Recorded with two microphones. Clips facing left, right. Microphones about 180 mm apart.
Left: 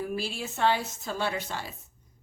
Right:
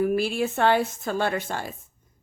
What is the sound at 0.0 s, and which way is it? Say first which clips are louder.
A woman's voice: right 10 dB; 60° right (ahead or behind).